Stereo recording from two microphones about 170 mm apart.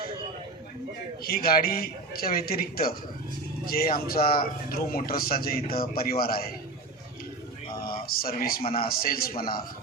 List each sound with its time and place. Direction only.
1.2 s speech: 60° left (ahead or behind)
7.9 s a sound: 60° left (ahead or behind)
8.4 s speech: 60° left (ahead or behind)